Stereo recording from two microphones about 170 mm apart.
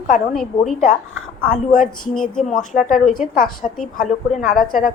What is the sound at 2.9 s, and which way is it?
A woman's voice, 55° left (ahead or behind).